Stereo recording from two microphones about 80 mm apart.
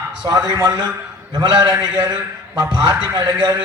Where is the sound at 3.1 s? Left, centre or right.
Right.